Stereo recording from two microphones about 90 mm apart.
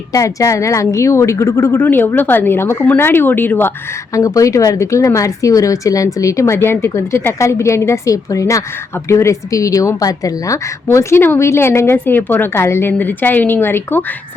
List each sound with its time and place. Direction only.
0.1 s a woman's voice: 40° left (ahead or behind); by 3.7 s 25° left (ahead or behind)
4.1 s a woman's voice: 40° left (ahead or behind)
10.8 s a woman's voice: 25° left (ahead or behind)